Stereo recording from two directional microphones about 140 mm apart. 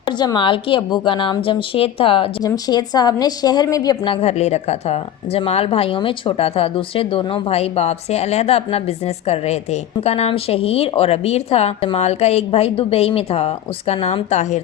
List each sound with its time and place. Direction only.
0.2 s a woman's voice: 35° left (ahead or behind)
2.4 s a woman's voice: 30° left (ahead or behind); by 14.6 s 55° left (ahead or behind)